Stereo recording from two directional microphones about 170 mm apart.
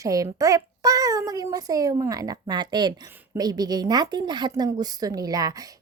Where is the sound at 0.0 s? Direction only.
20° right (ahead or behind).